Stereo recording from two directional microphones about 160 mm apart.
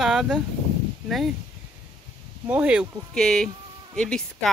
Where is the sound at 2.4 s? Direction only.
10° right (ahead or behind).